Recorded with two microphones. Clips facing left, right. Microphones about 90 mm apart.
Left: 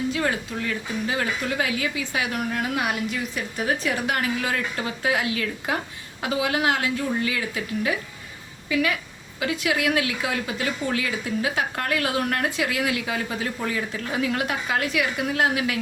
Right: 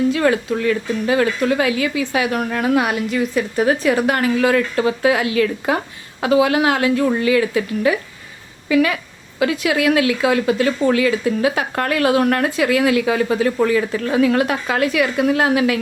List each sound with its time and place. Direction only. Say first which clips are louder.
0.1 s a woman's voice: right 9 dB; 75° right (ahead or behind)
3.6 s speech: right 9 dB; 75° right (ahead or behind)
8.7 s a woman's voice: right 8 dB; 65° right (ahead or behind)
9.4 s speech: right 7 dB; 80° right